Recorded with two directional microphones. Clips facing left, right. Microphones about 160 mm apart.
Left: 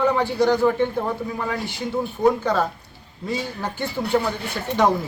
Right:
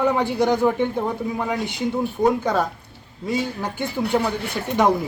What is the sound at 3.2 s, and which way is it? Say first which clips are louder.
Speech: right 2 dB; 10° right (ahead or behind).